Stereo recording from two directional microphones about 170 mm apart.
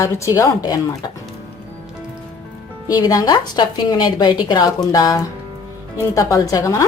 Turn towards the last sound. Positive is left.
turn(degrees=20)  # may be behind; listen again after turning